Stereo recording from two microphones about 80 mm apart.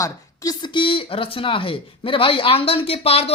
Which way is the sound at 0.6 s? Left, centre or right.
Left.